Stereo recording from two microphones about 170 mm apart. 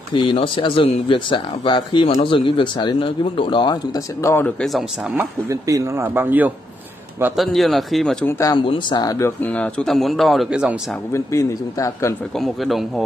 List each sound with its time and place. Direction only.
0.1 s speech: 30° left (ahead or behind)
4.6 s speech: centre (ahead or behind)
5.1 s speech: 20° right (ahead or behind)
7.3 s speech: centre (ahead or behind)
8.3 s speech: 20° left (ahead or behind)
8.6 s speech: 30° left (ahead or behind); by 10.8 s 5° right (ahead or behind)
11.1 s speech: 15° left (ahead or behind)
12.4 s speech: centre (ahead or behind)